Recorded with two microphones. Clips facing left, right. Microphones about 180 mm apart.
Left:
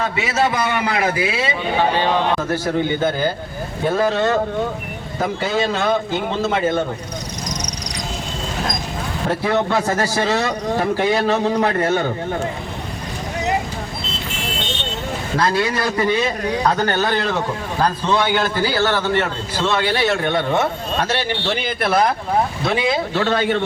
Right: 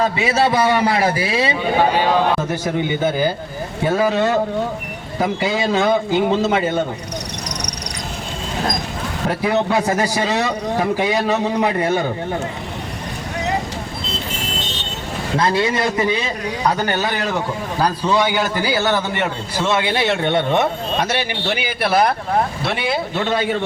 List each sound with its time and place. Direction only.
0.0 s a man's voice: 35° right (ahead or behind)
2.5 s a man's voice: 15° right (ahead or behind)
9.6 s a man's voice: 10° right (ahead or behind)
15.4 s a man's voice: 25° right (ahead or behind); by 22.1 s 5° right (ahead or behind)
23.2 s a man's voice: 10° right (ahead or behind)